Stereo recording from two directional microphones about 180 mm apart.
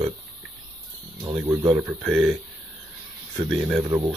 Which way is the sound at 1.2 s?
20° right (ahead or behind).